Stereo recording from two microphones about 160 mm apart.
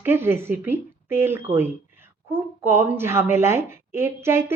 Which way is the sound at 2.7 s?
15° right (ahead or behind).